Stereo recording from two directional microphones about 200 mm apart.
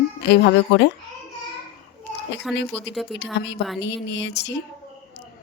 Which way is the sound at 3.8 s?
60° left (ahead or behind).